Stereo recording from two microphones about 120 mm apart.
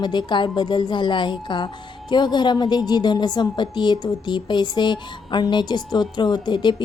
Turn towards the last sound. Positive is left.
turn(degrees=40)  # may be behind; listen again after turning